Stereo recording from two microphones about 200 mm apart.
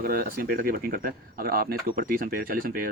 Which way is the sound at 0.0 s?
45° right (ahead or behind).